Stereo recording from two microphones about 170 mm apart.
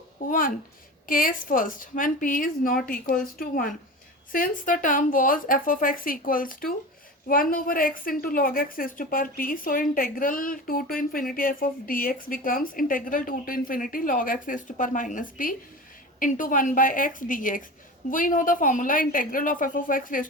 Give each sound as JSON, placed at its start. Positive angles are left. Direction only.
{"t": 0.3, "sound": "a woman's voice", "side_deg": 55}